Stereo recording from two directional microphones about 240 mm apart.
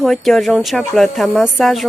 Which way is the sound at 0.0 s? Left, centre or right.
Centre.